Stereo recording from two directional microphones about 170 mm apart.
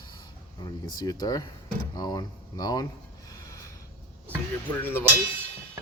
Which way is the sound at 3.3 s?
15° left (ahead or behind).